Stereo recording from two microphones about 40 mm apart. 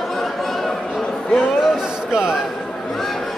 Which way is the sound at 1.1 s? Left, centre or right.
Left.